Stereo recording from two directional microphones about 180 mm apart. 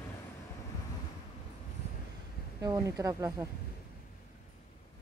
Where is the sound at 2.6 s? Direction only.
20° right (ahead or behind).